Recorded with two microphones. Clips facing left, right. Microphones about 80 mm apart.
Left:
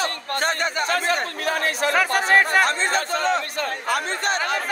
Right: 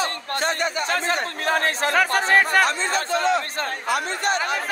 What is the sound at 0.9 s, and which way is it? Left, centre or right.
Speech, right.